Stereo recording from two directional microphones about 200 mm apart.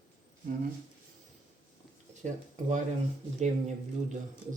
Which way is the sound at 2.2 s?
35° right (ahead or behind).